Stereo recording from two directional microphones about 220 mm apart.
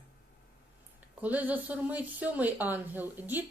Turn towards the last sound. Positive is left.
turn(degrees=-10)  # may be behind; listen again after turning